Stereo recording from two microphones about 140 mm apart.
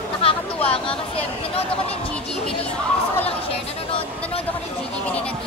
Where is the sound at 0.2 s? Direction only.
45° left (ahead or behind).